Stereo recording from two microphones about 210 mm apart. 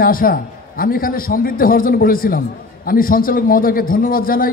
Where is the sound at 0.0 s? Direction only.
45° left (ahead or behind).